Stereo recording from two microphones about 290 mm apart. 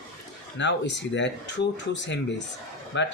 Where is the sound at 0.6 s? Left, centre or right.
Left.